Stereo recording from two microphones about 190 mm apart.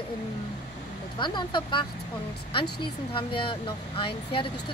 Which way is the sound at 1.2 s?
25° left (ahead or behind).